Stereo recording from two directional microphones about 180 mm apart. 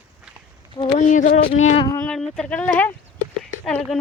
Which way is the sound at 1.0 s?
45° left (ahead or behind).